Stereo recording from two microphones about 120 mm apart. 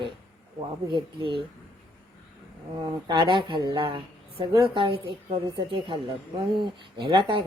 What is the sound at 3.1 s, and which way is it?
A woman's voice, 45° right (ahead or behind).